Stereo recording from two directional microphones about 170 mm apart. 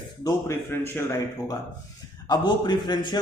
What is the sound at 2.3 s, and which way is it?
Speech, 25° left (ahead or behind).